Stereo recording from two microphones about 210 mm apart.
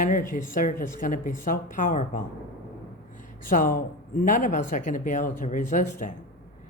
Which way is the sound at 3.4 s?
40° left (ahead or behind).